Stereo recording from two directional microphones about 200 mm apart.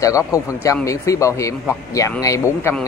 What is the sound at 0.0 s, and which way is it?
Speech, 15° left (ahead or behind).